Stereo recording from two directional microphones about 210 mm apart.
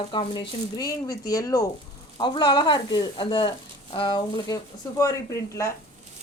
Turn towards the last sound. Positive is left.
turn(degrees=15)  # may be behind; listen again after turning